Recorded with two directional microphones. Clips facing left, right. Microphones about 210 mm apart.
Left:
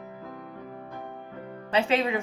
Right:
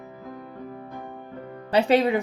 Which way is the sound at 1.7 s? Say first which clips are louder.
Right 5 dB; 35° right (ahead or behind).